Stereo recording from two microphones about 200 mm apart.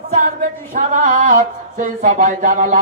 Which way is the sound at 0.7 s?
40° right (ahead or behind).